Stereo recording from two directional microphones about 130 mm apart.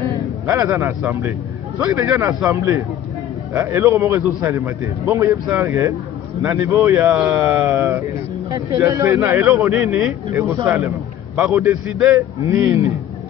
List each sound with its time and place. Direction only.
0.5 s a man's voice: 20° right (ahead or behind)
9.5 s a man's voice: 10° right (ahead or behind)
12.4 s a man's voice: 20° right (ahead or behind)